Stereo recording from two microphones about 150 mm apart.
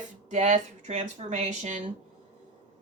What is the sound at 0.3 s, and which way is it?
Speech, 55° right (ahead or behind).